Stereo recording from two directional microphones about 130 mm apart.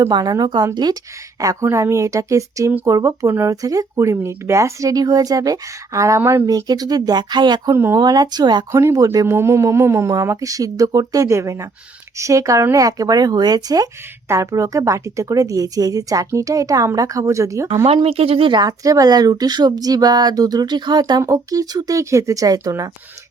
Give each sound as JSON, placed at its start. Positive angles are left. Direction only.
{"t": 0.1, "sound": "a woman's voice", "side_deg": -30}
{"t": 7.7, "sound": "a woman's voice", "side_deg": -20}
{"t": 8.0, "sound": "speech", "side_deg": -30}
{"t": 8.8, "sound": "a woman's voice", "side_deg": -20}
{"t": 17.8, "sound": "speech", "side_deg": -50}